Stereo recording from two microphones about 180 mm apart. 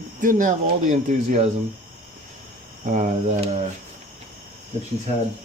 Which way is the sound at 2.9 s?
45° right (ahead or behind).